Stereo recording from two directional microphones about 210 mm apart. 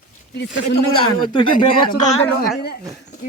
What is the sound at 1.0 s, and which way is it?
Speech, 25° left (ahead or behind).